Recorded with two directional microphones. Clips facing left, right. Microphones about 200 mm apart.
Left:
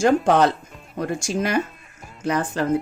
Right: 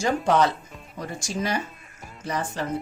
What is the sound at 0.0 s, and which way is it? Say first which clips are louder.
A woman's voice: left 5 dB; 50° left (ahead or behind).